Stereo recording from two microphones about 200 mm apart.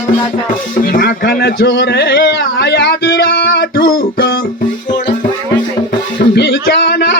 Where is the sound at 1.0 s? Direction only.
55° left (ahead or behind).